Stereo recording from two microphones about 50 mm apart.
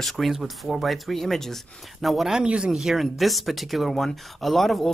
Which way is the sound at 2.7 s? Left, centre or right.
Centre.